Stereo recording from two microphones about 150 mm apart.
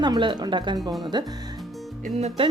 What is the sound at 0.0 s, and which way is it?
Speech, 30° right (ahead or behind).